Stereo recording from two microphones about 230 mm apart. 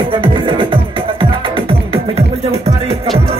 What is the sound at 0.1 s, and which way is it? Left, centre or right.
Music, right.